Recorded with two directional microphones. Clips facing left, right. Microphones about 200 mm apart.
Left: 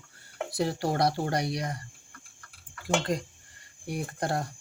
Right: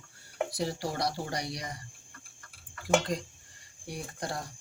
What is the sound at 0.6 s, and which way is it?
Speech, 60° left (ahead or behind).